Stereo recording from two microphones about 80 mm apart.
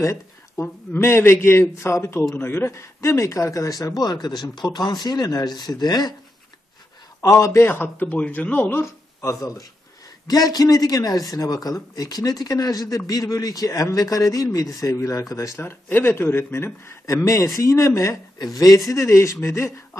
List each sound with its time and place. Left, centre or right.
0.0 s a man's voice: left
7.2 s a man's voice: left
7.6 s a man's voice: left
8.8 s speech: left
10.2 s speech: left
15.9 s a man's voice: left
18.9 s a man's voice: left